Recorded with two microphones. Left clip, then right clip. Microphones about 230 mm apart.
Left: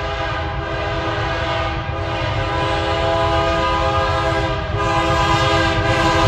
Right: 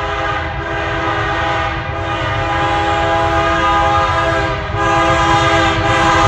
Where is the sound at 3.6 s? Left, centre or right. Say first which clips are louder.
Right 5 dB; centre.